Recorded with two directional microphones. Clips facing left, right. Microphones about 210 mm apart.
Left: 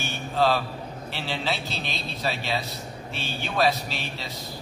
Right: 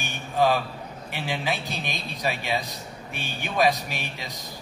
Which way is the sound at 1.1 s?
15° right (ahead or behind).